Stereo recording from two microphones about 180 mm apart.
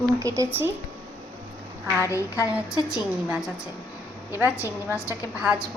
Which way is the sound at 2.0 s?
15° left (ahead or behind).